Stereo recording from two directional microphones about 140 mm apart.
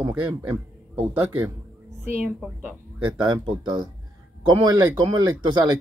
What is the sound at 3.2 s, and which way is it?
Speech, 30° right (ahead or behind).